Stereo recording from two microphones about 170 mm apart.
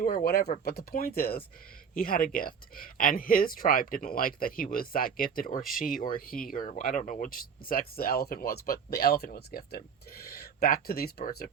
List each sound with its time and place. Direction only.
0.0 s speech: 60° left (ahead or behind)